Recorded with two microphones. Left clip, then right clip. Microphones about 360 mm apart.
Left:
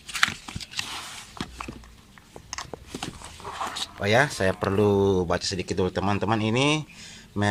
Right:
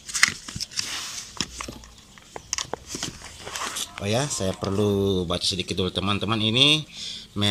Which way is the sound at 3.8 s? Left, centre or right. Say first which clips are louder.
Left 7 dB; left.